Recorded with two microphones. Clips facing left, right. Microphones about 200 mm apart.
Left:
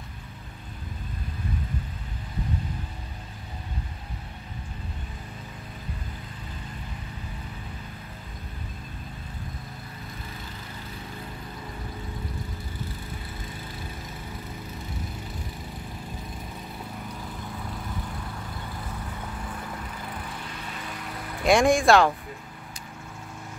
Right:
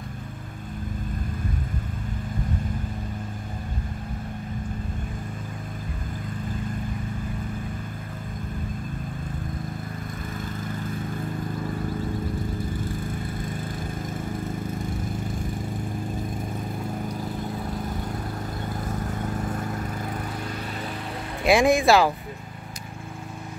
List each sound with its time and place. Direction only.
18.7 s vehicle: 45° right (ahead or behind)
21.5 s speech: centre (ahead or behind)